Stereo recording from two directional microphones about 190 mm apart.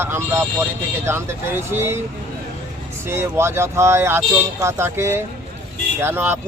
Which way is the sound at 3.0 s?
15° right (ahead or behind).